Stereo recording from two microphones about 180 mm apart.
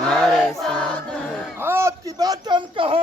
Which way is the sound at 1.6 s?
15° right (ahead or behind).